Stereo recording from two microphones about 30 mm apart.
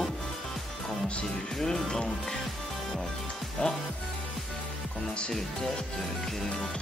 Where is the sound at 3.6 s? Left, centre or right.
Left.